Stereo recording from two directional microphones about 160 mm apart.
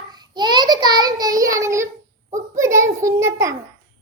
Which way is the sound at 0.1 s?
25° right (ahead or behind).